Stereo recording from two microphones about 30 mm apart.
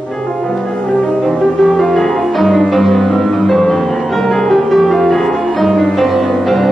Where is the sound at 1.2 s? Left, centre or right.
Centre.